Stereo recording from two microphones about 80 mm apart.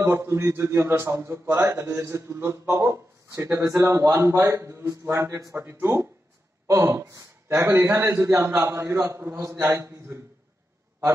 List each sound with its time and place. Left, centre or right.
0.0 s a man's voice: right